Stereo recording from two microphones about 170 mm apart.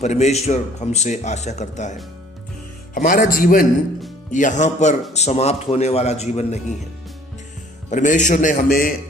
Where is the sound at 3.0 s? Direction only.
50° left (ahead or behind).